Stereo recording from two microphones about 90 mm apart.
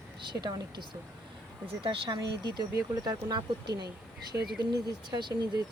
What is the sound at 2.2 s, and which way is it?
Speech, 55° right (ahead or behind).